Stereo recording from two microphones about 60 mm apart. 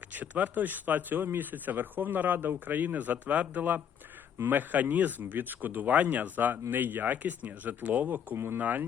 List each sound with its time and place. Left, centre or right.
0.1 s speech: right